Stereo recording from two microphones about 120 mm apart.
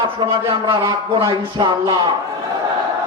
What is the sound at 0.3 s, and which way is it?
A man's voice, 45° right (ahead or behind).